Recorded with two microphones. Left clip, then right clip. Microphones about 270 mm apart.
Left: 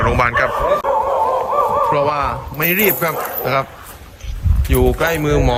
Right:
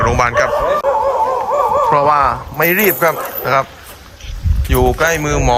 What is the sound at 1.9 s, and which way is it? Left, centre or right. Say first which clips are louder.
Speech: right 5 dB; centre.